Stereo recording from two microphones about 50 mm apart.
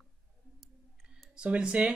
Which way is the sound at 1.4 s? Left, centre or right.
Centre.